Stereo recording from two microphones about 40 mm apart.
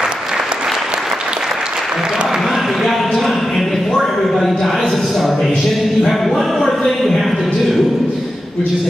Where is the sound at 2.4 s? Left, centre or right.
Centre.